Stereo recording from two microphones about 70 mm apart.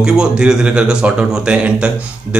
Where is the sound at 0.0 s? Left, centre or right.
Centre.